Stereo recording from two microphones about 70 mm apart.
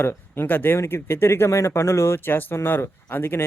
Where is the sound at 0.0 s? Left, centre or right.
Left.